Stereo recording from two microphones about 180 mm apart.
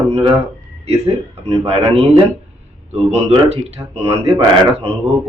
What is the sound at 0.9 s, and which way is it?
A man's voice, 35° right (ahead or behind).